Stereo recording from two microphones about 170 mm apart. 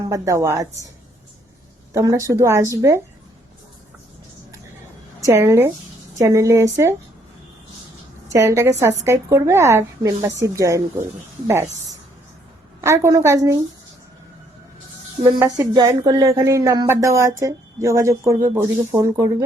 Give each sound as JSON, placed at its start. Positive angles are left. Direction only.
{"t": 0.0, "sound": "speech", "side_deg": -20}
{"t": 1.9, "sound": "speech", "side_deg": -20}
{"t": 5.2, "sound": "a woman's voice", "side_deg": -15}
{"t": 8.3, "sound": "a woman's voice", "side_deg": -15}
{"t": 15.2, "sound": "speech", "side_deg": -20}